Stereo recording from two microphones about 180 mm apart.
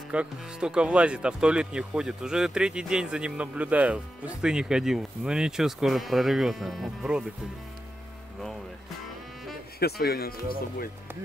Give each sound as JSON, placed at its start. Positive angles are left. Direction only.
{"t": 0.1, "sound": "speech", "side_deg": -5}
{"t": 9.8, "sound": "speech", "side_deg": 60}